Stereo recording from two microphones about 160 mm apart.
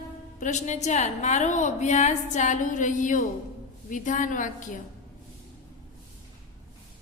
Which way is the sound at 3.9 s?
55° left (ahead or behind).